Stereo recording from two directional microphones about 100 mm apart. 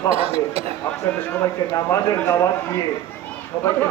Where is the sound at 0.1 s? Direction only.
80° right.